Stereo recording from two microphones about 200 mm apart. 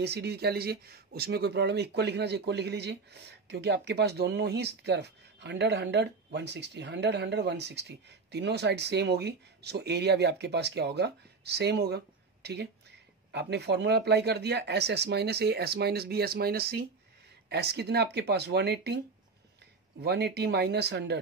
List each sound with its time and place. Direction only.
0.0 s speech: 55° right (ahead or behind)
20.0 s speech: 55° right (ahead or behind)